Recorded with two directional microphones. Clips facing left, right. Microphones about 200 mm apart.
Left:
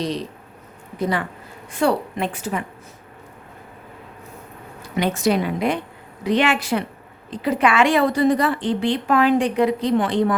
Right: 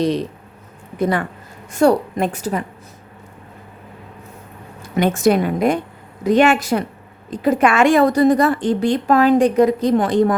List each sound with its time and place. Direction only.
0.9 s a woman's voice: 50° right (ahead or behind)
4.9 s a woman's voice: 50° right (ahead or behind)